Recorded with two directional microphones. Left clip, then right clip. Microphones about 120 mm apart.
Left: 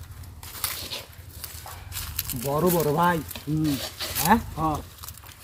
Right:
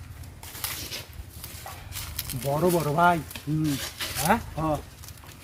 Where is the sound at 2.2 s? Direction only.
50° left (ahead or behind).